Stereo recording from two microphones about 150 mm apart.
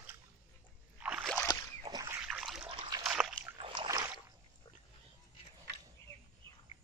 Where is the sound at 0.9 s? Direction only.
10° right (ahead or behind).